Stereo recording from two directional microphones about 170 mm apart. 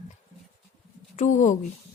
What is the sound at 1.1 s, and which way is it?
Speech, 45° left (ahead or behind).